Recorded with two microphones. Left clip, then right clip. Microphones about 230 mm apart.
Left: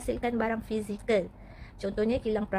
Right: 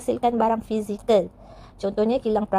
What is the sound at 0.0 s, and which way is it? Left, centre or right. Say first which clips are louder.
A woman's voice: right 9 dB; centre.